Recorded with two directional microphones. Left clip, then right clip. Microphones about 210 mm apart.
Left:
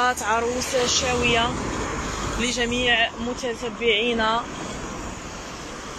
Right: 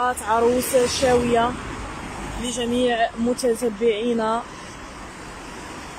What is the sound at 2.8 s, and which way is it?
Speech, 25° right (ahead or behind).